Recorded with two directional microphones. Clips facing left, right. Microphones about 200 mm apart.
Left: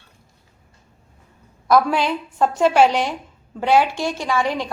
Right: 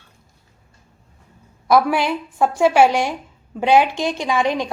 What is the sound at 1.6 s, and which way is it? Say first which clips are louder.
A woman's voice: right 1 dB; 10° right (ahead or behind).